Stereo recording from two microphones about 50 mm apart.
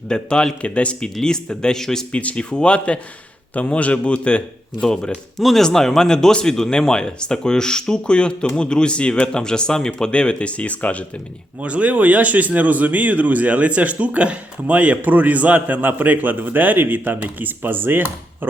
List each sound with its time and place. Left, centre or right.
0.1 s speech: centre
2.1 s speech: left
5.4 s speech: centre; by 11.0 s left
11.6 s speech: right